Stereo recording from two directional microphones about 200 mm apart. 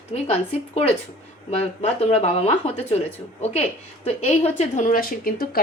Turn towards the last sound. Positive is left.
turn(degrees=45)  # may be behind; listen again after turning